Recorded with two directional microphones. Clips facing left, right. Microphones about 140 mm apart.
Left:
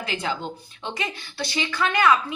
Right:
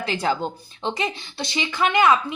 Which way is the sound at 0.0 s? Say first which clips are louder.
Right 5 dB; 35° right (ahead or behind).